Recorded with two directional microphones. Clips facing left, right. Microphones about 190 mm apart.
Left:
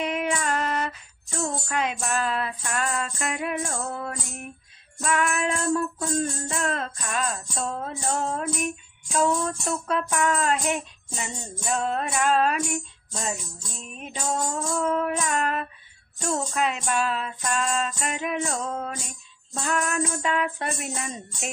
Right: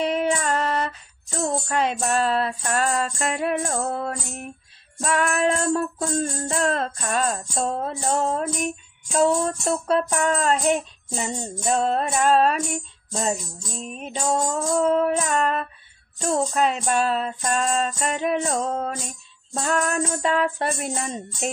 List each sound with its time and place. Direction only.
0.0 s music: 30° right (ahead or behind)
5.7 s music: 30° right (ahead or behind)